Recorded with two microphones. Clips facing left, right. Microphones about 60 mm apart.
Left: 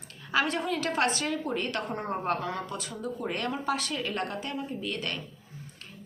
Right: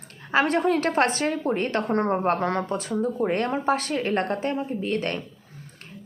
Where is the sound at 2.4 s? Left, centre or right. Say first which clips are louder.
Right 8 dB; right.